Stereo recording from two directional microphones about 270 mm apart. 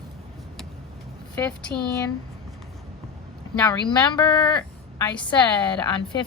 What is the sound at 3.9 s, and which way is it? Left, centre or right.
Speech, centre.